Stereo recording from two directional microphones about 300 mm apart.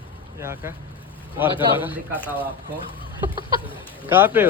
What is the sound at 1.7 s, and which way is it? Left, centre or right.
Speech, centre.